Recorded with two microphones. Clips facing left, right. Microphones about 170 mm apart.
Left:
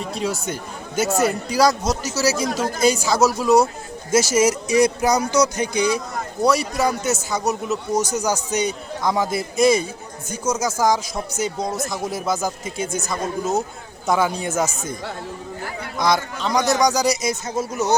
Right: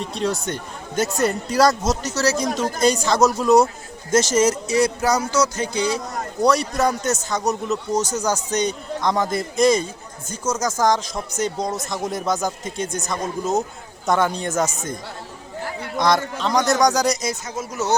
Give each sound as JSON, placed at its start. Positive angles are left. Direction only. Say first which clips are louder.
{"t": 0.0, "sound": "a man's voice", "louder": "right 1 dB", "side_deg": 5}
{"t": 6.4, "sound": "a man's voice", "louder": "right 1 dB", "side_deg": 5}
{"t": 16.0, "sound": "a man's voice", "louder": "right 1 dB", "side_deg": 0}
{"t": 17.4, "sound": "speech", "louder": "left 5 dB", "side_deg": 30}